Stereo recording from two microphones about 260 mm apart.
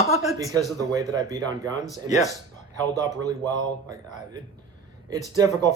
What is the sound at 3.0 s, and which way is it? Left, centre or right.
Speech, centre.